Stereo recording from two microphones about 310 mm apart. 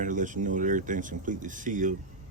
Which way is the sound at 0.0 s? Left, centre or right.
Right.